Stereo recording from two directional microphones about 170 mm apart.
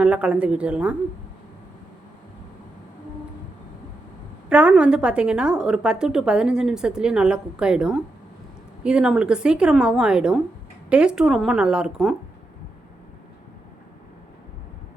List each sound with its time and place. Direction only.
0.0 s speech: 5° right (ahead or behind)
4.4 s a woman's voice: 5° right (ahead or behind)